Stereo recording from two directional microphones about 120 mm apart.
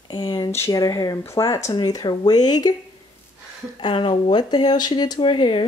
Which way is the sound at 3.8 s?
40° left (ahead or behind).